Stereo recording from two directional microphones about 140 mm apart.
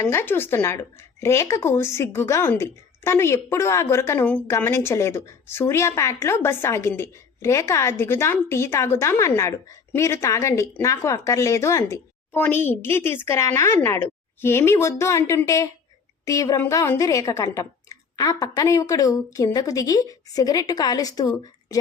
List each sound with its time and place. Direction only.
0.0 s a woman's voice: 15° left (ahead or behind)